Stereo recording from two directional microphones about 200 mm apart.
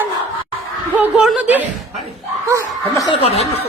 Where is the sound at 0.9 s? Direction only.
5° right (ahead or behind).